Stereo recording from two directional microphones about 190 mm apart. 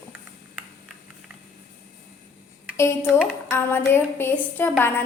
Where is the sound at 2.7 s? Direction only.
15° left (ahead or behind).